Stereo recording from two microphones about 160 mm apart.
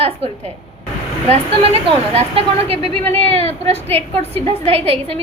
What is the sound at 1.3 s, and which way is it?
A woman's voice, 35° right (ahead or behind).